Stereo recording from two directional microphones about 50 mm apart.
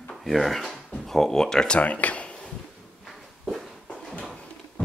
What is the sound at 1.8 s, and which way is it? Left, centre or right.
Speech, left.